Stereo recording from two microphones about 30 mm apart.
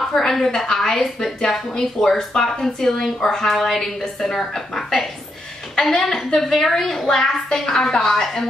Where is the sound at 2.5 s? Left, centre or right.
Centre.